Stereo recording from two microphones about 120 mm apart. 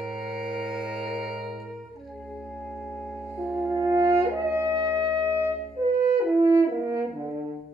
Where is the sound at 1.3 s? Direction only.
Centre (ahead or behind).